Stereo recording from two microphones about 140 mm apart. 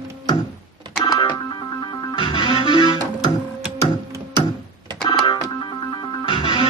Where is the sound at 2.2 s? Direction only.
35° left (ahead or behind).